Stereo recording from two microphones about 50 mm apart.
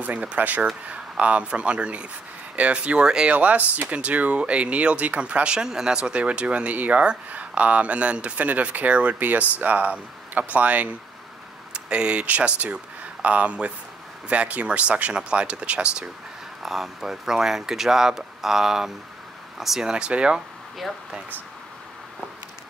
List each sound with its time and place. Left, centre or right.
0.0 s speech: right
3.3 s speech: right
16.6 s speech: centre
19.9 s speech: centre